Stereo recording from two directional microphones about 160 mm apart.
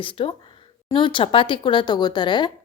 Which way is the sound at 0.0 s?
35° left (ahead or behind).